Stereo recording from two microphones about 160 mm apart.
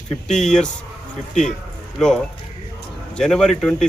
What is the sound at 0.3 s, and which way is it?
Speech, 5° left (ahead or behind).